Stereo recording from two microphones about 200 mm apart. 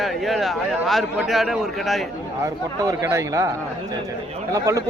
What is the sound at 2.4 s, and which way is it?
Speech, 15° right (ahead or behind).